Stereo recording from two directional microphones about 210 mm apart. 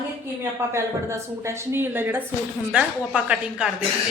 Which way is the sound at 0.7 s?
15° right (ahead or behind).